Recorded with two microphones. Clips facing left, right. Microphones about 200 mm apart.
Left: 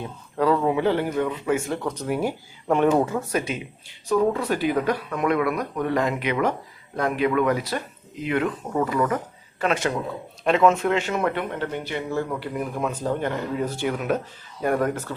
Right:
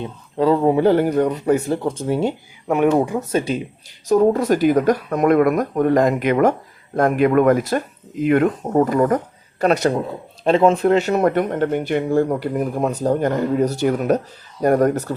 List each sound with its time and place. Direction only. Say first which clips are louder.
0.0 s speech: right 4 dB; 25° right (ahead or behind)
2.6 s speech: right 3 dB; 10° right (ahead or behind)
3.3 s speech: right 6 dB; 35° right (ahead or behind)